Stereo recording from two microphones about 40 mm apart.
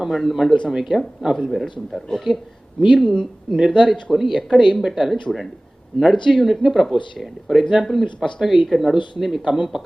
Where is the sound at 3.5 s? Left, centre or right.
Centre.